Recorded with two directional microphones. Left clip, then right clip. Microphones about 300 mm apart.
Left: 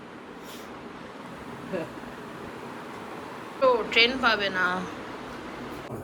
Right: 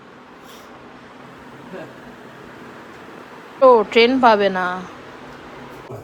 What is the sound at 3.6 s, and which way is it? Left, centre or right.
A woman's voice, centre.